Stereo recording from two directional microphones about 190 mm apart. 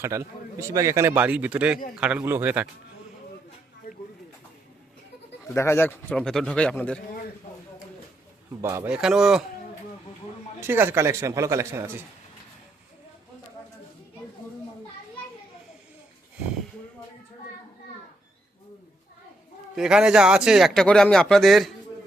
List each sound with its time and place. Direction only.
0.0 s a man's voice: 15° right (ahead or behind)
3.9 s a sound: 50° left (ahead or behind)
5.5 s speech: 15° left (ahead or behind)
8.6 s speech: 10° right (ahead or behind)
10.6 s a man's voice: 10° right (ahead or behind)
19.7 s speech: 5° right (ahead or behind)